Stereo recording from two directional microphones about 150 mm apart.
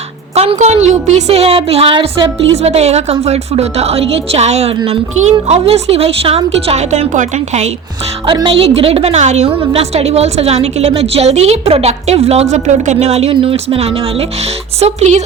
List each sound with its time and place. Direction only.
0.3 s a woman's voice: 45° right (ahead or behind)
2.6 s a woman's voice: 45° right (ahead or behind)
8.3 s a woman's voice: 35° right (ahead or behind)